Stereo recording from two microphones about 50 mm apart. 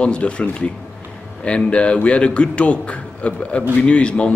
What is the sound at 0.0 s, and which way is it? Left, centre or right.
Speech, left.